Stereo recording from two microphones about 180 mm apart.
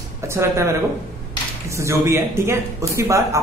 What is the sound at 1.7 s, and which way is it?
Speech, 15° right (ahead or behind).